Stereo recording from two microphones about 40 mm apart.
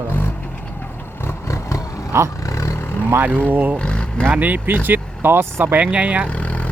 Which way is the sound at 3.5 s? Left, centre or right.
Right.